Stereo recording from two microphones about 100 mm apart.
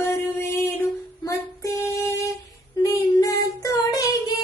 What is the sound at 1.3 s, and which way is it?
Child singing, 30° left (ahead or behind).